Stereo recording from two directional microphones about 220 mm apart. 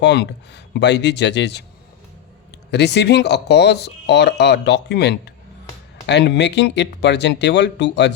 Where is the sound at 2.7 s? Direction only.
50° left (ahead or behind).